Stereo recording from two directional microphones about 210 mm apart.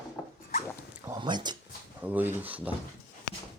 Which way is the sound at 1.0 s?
20° right (ahead or behind).